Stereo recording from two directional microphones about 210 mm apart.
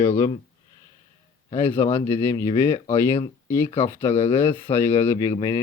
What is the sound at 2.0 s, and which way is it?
Speech, 15° left (ahead or behind).